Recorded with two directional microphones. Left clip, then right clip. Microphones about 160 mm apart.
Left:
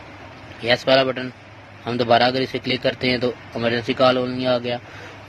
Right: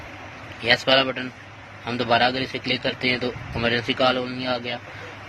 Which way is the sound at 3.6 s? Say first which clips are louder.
Left 2 dB; 30° left (ahead or behind).